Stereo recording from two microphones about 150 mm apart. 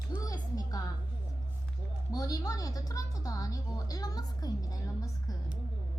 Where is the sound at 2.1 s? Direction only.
25° left (ahead or behind).